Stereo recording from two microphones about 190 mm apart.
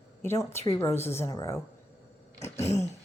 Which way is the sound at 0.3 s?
15° left (ahead or behind).